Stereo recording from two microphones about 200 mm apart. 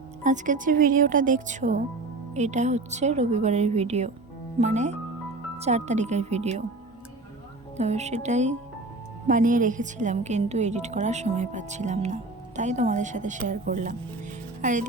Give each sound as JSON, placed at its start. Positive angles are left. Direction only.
{"t": 0.2, "sound": "a woman's voice", "side_deg": -40}
{"t": 7.8, "sound": "a woman's voice", "side_deg": -35}